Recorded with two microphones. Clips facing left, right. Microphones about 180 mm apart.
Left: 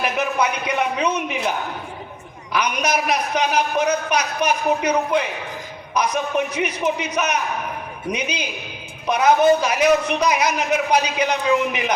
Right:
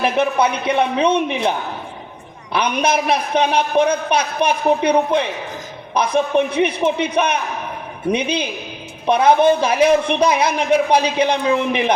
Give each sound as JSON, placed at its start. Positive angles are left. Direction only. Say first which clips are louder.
{"t": 0.0, "sound": "a man's voice", "louder": "right 4 dB", "side_deg": -30}